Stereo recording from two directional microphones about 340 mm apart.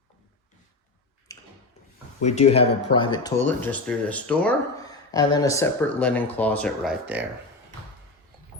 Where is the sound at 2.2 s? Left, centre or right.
Centre.